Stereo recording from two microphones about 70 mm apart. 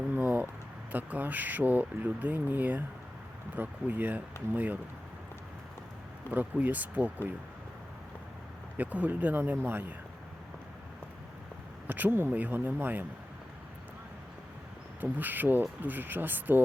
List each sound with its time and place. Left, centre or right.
0.1 s a sound: right
0.9 s speech: right
6.3 s speech: right
8.8 s speech: right
11.9 s speech: right
15.0 s speech: right